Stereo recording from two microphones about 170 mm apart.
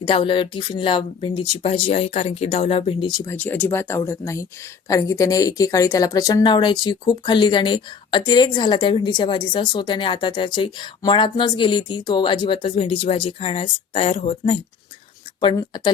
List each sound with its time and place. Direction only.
0.0 s speech: 30° left (ahead or behind)
3.2 s speech: 10° left (ahead or behind)